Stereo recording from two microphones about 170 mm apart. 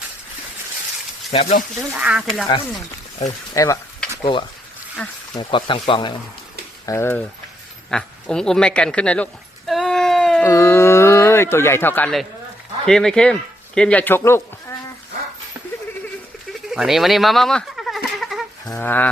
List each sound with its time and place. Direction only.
1.3 s speech: 35° left (ahead or behind)
1.9 s speech: 10° right (ahead or behind)
3.2 s speech: 20° left (ahead or behind)
5.0 s speech: 10° left (ahead or behind)
5.3 s speech: 30° left (ahead or behind)
6.8 s speech: 15° left (ahead or behind)
7.9 s a sound: 5° left (ahead or behind)
10.4 s speech: 15° left (ahead or behind)
16.6 s a sound: centre (ahead or behind)
18.6 s speech: 15° left (ahead or behind)